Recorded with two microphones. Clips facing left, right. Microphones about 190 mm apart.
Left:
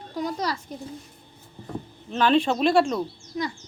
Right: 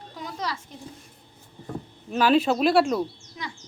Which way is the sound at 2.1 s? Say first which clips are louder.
Right 1 dB; 5° right (ahead or behind).